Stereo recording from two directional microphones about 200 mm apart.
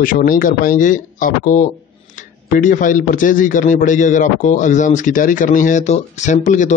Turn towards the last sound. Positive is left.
turn(degrees=35)  # may be behind; listen again after turning